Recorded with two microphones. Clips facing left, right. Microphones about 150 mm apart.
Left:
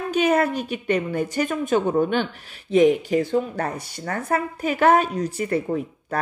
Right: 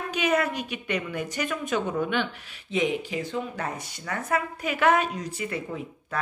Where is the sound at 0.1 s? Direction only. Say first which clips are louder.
Left 6 dB; 40° left (ahead or behind).